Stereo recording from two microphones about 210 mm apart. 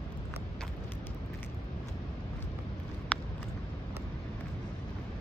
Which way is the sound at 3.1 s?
5° left (ahead or behind).